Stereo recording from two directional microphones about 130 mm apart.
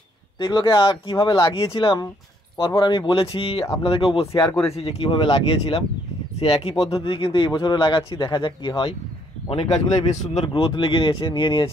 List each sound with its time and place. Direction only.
0.4 s speech: 35° left (ahead or behind)
4.3 s speech: 25° left (ahead or behind)
4.6 s speech: 50° left (ahead or behind)
9.5 s speech: 50° left (ahead or behind)
10.4 s speech: 40° left (ahead or behind)